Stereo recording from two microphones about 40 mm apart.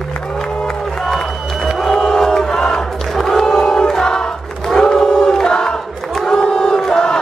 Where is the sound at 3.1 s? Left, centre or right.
Centre.